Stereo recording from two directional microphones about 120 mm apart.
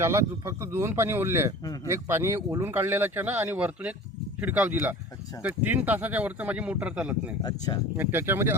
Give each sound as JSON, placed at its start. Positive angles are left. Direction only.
{"t": 0.0, "sound": "speech", "side_deg": -25}
{"t": 1.6, "sound": "speech", "side_deg": 30}
{"t": 1.9, "sound": "speech", "side_deg": -20}
{"t": 7.4, "sound": "speech", "side_deg": 35}
{"t": 7.9, "sound": "speech", "side_deg": -15}